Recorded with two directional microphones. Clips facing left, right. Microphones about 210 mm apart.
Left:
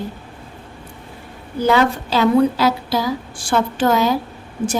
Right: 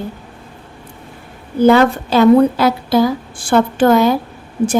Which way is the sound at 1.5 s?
55° right (ahead or behind).